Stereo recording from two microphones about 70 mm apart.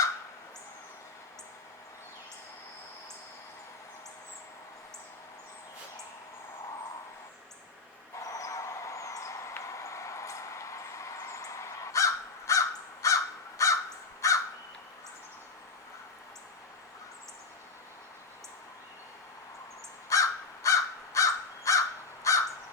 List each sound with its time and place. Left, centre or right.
8.2 s a sound: left
14.2 s crow: left
20.1 s crow: left